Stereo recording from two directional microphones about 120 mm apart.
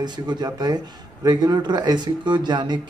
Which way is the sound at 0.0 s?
40° right (ahead or behind).